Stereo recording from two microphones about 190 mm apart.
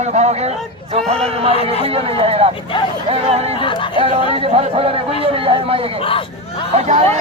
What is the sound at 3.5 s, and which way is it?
Speech, 25° left (ahead or behind).